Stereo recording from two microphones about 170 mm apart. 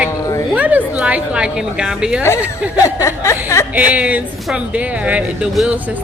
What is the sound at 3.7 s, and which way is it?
Speech, 10° right (ahead or behind).